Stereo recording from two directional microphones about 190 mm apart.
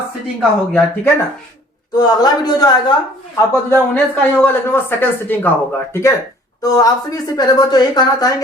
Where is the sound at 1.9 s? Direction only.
20° left (ahead or behind).